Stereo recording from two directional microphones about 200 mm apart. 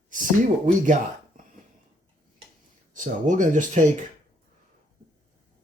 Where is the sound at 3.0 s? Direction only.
40° right (ahead or behind).